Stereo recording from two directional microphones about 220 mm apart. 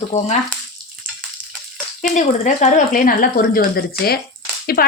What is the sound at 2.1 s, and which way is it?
A woman's voice, 35° left (ahead or behind).